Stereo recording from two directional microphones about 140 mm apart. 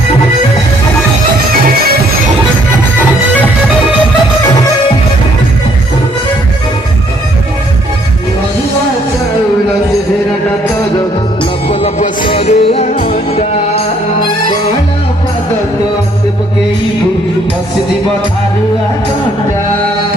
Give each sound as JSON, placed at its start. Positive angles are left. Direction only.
{"t": 11.7, "sound": "music", "side_deg": 45}
{"t": 13.0, "sound": "music", "side_deg": 70}